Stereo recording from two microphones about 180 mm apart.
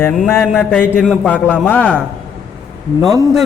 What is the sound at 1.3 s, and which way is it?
Speech, 10° left (ahead or behind).